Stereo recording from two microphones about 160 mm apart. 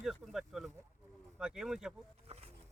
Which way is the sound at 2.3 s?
40° right (ahead or behind).